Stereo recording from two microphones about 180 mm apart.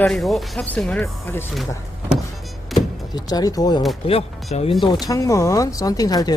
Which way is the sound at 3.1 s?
20° left (ahead or behind).